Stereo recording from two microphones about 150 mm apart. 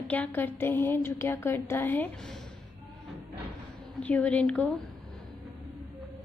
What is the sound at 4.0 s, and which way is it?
Speech, 10° left (ahead or behind).